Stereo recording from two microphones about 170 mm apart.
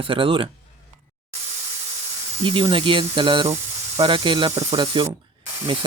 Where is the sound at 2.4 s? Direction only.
30° right (ahead or behind).